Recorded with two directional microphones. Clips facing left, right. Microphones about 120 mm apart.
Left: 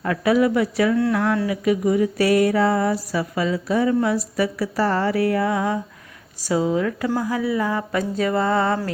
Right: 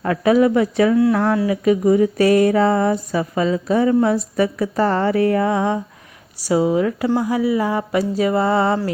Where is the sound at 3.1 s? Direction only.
30° right (ahead or behind).